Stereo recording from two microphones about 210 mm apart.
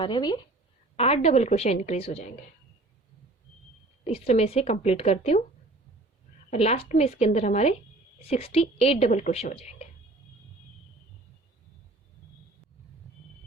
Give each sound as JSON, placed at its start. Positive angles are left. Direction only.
{"t": 0.0, "sound": "a woman's voice", "side_deg": 20}
{"t": 4.0, "sound": "speech", "side_deg": 30}
{"t": 6.5, "sound": "a woman's voice", "side_deg": 30}